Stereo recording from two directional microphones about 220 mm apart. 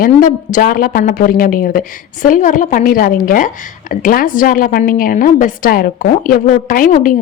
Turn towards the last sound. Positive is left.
turn(degrees=35)  # may be behind; listen again after turning